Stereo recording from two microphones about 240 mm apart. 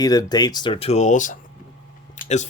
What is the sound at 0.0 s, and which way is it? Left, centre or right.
Speech, centre.